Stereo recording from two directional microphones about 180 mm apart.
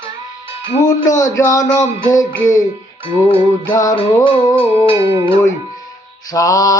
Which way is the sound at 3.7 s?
20° left (ahead or behind).